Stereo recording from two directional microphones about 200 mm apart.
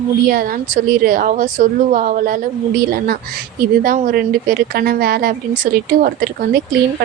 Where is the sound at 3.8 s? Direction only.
45° right (ahead or behind).